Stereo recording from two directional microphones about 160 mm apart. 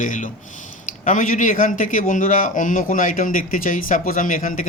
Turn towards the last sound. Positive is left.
turn(degrees=55)  # may be behind; listen again after turning